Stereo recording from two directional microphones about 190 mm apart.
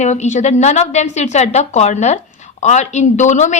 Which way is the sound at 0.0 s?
35° left (ahead or behind).